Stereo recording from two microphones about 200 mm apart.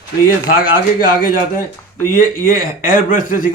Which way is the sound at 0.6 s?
45° left (ahead or behind).